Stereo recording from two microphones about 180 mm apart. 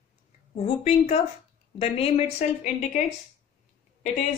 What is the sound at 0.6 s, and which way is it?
A woman's voice, 35° left (ahead or behind).